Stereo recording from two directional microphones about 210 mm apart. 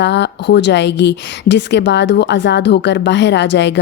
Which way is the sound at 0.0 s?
55° left (ahead or behind).